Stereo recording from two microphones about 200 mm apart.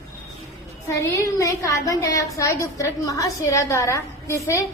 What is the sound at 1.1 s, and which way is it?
A woman's voice, 15° left (ahead or behind).